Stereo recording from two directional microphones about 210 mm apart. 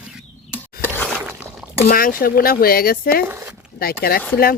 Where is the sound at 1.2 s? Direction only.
10° right (ahead or behind).